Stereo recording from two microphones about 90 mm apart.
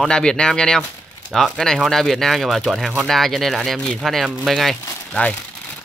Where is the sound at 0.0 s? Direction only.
10° left (ahead or behind).